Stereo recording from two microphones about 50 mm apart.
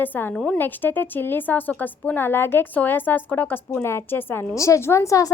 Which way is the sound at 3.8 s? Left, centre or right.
Left.